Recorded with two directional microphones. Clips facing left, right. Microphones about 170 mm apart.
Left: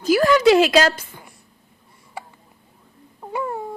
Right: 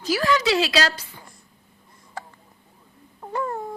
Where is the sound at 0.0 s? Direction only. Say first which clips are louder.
Left 7 dB; 50° left (ahead or behind).